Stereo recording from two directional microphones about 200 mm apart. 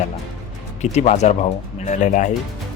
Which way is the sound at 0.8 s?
35° left (ahead or behind).